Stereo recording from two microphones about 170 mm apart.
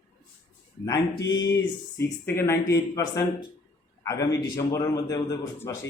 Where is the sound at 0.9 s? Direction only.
90° left.